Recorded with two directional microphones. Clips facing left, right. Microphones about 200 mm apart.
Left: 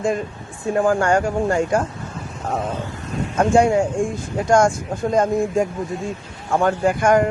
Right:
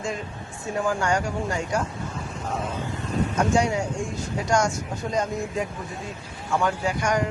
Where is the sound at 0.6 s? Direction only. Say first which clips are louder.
Left 8 dB; 55° left (ahead or behind).